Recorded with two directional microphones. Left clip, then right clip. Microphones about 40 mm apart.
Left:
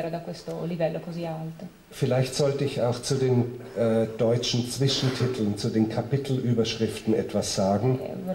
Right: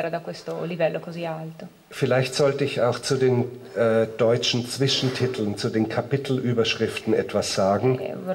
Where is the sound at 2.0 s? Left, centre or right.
Right.